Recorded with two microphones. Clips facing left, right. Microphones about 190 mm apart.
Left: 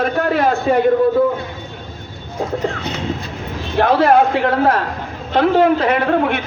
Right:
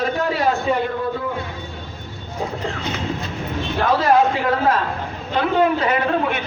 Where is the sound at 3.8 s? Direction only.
60° left (ahead or behind).